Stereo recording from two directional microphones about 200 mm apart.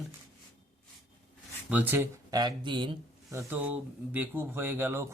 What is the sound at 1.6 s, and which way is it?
Speech, 10° right (ahead or behind).